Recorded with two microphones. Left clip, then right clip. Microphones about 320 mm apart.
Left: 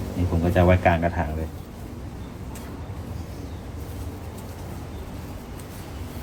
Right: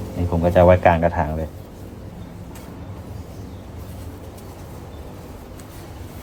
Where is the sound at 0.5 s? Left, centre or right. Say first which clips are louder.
Right 6 dB; right.